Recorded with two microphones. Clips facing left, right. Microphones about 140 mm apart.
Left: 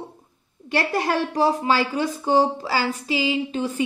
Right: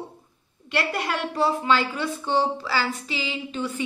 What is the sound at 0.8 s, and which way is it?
A woman's voice, 40° left (ahead or behind).